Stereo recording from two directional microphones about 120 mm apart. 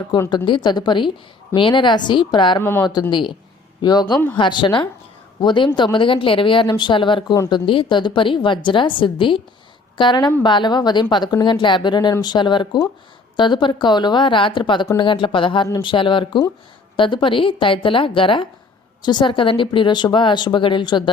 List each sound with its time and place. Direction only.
0.3 s speech: 40° left (ahead or behind)
2.6 s a woman's voice: 20° left (ahead or behind)
2.8 s speech: 40° left (ahead or behind)